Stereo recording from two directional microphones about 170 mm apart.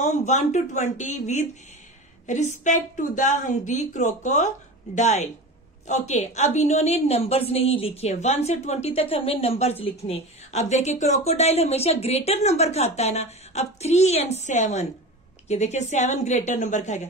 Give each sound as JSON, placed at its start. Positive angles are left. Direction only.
{"t": 0.0, "sound": "a woman's voice", "side_deg": 45}